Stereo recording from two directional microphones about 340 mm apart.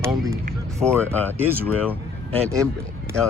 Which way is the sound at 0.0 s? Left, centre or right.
Centre.